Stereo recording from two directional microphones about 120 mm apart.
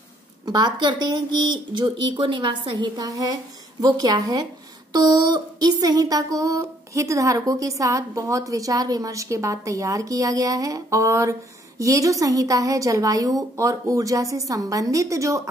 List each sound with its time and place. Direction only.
0.5 s speech: 35° right (ahead or behind)
3.1 s speech: 30° right (ahead or behind)